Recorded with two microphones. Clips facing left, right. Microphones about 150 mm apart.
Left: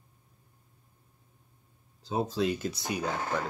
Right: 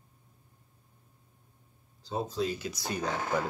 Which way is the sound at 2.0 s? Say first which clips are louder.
Left 3 dB; 70° left (ahead or behind).